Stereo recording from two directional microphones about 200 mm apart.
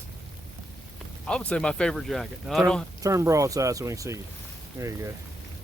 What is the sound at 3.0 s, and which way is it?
Speech, 15° right (ahead or behind).